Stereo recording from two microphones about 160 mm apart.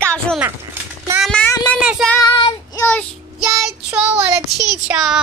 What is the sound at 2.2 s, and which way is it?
Child singing, 25° left (ahead or behind).